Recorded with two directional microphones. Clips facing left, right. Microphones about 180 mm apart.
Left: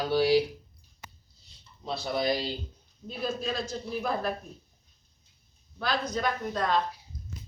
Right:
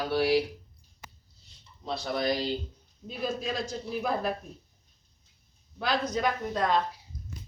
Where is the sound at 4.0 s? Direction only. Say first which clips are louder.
Right 1 dB; 10° right (ahead or behind).